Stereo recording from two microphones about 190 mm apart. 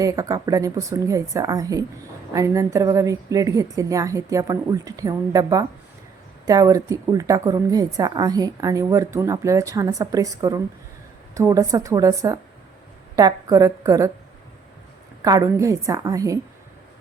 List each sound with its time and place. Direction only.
0.0 s a woman's voice: 20° right (ahead or behind)
15.2 s a woman's voice: 20° right (ahead or behind)